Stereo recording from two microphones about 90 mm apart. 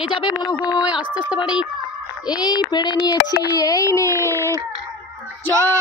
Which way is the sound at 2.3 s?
55° left (ahead or behind).